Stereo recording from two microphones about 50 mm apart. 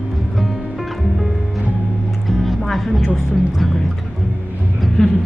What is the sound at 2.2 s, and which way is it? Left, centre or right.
Music, centre.